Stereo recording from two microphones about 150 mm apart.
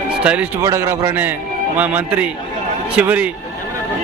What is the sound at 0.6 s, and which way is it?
A man's voice, 20° right (ahead or behind).